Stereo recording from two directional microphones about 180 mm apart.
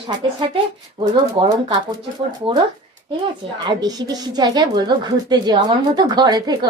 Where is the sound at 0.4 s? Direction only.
30° right (ahead or behind).